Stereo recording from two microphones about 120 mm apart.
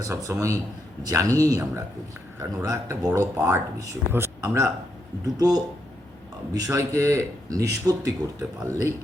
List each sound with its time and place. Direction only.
0.0 s speech: 25° right (ahead or behind)